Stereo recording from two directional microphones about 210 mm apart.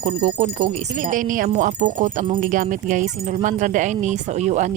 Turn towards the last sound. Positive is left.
turn(degrees=-35)  # may be behind; listen again after turning